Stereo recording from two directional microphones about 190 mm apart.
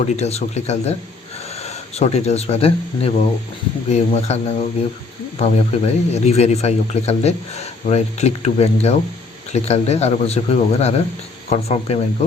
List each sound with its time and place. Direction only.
0.0 s speech: 35° left (ahead or behind)